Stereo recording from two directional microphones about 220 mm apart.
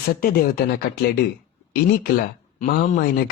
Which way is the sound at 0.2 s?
45° left (ahead or behind).